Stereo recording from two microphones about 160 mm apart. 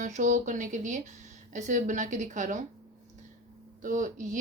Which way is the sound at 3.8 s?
55° right (ahead or behind).